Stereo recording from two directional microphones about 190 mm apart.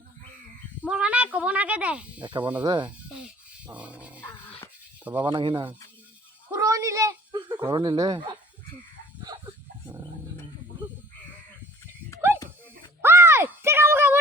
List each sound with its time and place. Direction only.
0.9 s speech: 5° right (ahead or behind)
2.2 s speech: 25° right (ahead or behind)
3.7 s dog: 5° right (ahead or behind)
5.2 s speech: 25° right (ahead or behind)
6.5 s a sound: 15° right (ahead or behind)
9.8 s roaring cats: 15° right (ahead or behind)
12.3 s dog: 10° right (ahead or behind)
13.0 s a sound: 15° right (ahead or behind)